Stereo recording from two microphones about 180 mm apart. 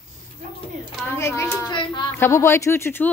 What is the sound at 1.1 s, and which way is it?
Speech, 15° left (ahead or behind).